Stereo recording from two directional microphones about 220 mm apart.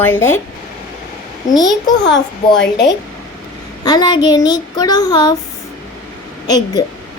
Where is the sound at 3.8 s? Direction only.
20° left (ahead or behind).